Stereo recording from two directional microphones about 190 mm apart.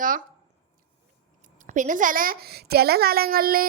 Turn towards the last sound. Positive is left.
turn(degrees=-50)  # may be behind; listen again after turning